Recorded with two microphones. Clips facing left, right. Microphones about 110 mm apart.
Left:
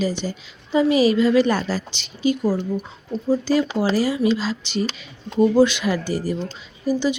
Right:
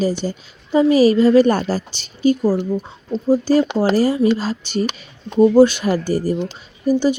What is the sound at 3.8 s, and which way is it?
A woman's voice, 40° right (ahead or behind).